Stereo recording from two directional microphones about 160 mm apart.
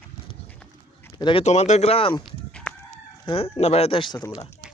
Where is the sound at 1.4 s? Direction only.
45° left (ahead or behind).